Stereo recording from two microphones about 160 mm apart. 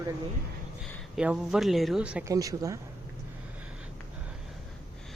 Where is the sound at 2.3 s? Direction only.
20° right (ahead or behind).